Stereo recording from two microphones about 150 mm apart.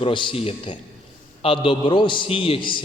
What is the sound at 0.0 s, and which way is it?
A man's voice, 35° left (ahead or behind).